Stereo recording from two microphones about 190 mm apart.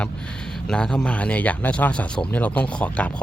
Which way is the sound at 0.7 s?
5° left (ahead or behind).